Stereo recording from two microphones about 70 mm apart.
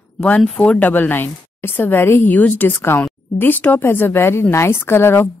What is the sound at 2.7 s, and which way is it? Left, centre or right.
A woman's voice, left.